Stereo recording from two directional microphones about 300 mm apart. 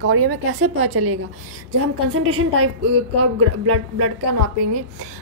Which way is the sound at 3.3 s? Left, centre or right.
Right.